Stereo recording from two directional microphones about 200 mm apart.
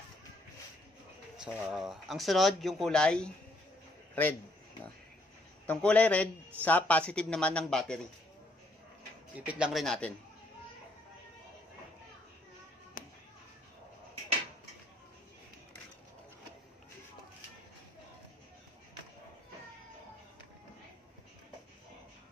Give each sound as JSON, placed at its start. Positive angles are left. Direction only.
{"t": 1.4, "sound": "a man's voice", "side_deg": 0}
{"t": 5.7, "sound": "a man's voice", "side_deg": 5}
{"t": 9.5, "sound": "a man's voice", "side_deg": -5}